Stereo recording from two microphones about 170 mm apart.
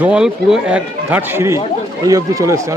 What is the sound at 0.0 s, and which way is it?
Speech, 5° right (ahead or behind).